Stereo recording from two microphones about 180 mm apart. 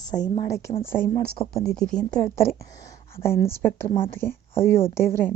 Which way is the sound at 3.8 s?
30° left (ahead or behind).